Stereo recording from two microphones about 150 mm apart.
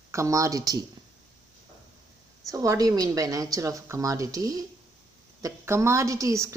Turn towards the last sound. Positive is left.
turn(degrees=-20)  # may be behind; listen again after turning